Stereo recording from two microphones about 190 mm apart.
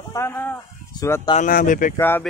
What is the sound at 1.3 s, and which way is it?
Speech, 45° left (ahead or behind).